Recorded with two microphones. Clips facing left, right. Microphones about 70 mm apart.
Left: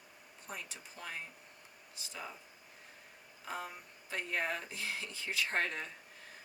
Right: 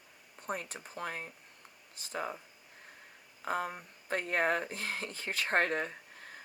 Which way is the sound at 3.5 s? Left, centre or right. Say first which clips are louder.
Right 8 dB; right.